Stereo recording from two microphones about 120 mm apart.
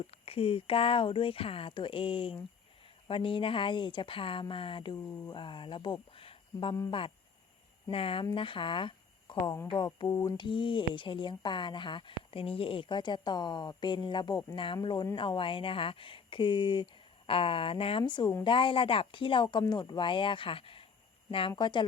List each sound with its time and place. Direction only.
0.1 s speech: 55° left (ahead or behind)
5.0 s speech: 20° left (ahead or behind)
5.3 s speech: 45° left (ahead or behind)
7.9 s speech: 50° left (ahead or behind)